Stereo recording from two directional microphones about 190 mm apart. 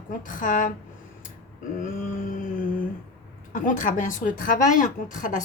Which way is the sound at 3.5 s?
45° left (ahead or behind).